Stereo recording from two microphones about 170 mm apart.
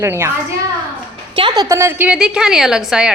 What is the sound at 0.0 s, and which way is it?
Speech, 15° right (ahead or behind).